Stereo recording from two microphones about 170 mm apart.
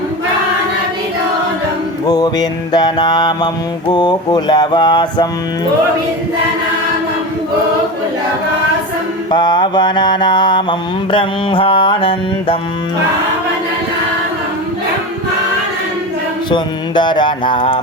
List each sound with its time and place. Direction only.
2.0 s music: 25° left (ahead or behind)
9.3 s music: 25° left (ahead or behind)
16.5 s music: 25° left (ahead or behind)